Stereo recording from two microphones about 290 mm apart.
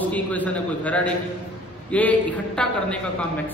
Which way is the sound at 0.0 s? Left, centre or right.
Centre.